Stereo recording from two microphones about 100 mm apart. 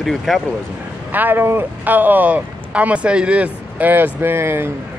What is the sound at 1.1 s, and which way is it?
Speech, 20° right (ahead or behind).